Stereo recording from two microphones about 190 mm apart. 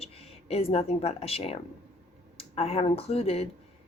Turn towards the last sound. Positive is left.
turn(degrees=35)  # may be behind; listen again after turning